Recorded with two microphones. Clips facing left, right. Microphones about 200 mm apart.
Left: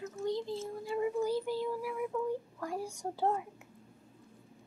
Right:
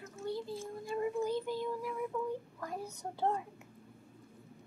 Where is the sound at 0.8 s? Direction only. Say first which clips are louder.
Left 2 dB; 10° left (ahead or behind).